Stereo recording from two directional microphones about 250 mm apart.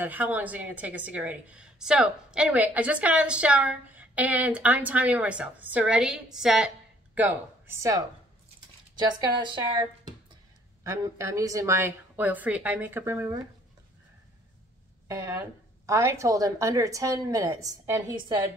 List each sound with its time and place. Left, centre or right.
0.0 s a woman's voice: centre
15.0 s a woman's voice: centre